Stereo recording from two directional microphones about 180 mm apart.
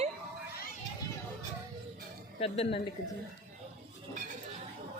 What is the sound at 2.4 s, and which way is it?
Speech, 30° left (ahead or behind).